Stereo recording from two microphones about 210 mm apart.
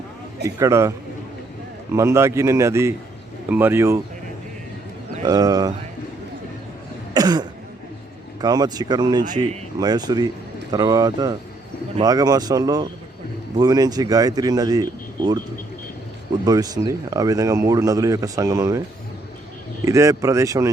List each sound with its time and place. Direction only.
0.4 s speech: 15° right (ahead or behind)
5.2 s speech: 20° right (ahead or behind)
7.1 s cough: 20° right (ahead or behind)
8.4 s speech: 20° right (ahead or behind)
16.5 s speech: 20° right (ahead or behind)
19.8 s speech: 15° right (ahead or behind)